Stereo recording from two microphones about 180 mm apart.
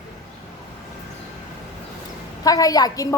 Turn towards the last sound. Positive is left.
turn(degrees=20)  # may be behind; listen again after turning